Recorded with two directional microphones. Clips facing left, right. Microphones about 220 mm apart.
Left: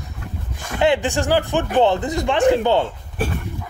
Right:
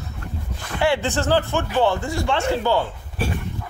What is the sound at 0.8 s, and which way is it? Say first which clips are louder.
Speech: left 3 dB; 15° left (ahead or behind).